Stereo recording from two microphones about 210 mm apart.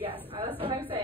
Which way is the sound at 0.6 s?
25° right (ahead or behind).